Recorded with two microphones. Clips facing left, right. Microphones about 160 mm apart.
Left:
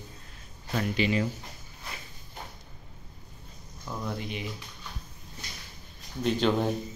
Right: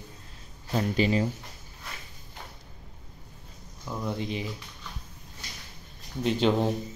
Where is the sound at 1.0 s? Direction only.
35° right (ahead or behind).